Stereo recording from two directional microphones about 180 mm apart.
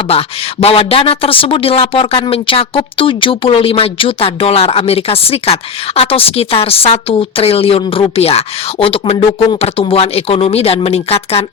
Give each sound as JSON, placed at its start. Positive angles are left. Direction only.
{"t": 0.1, "sound": "speech", "side_deg": 35}